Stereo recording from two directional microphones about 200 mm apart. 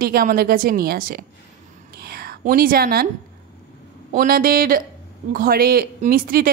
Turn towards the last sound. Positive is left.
turn(degrees=-45)  # may be behind; listen again after turning